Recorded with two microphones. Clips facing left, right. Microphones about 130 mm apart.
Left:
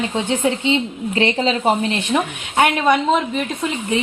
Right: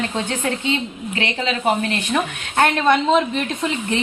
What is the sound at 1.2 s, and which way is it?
A woman's voice, 30° left (ahead or behind).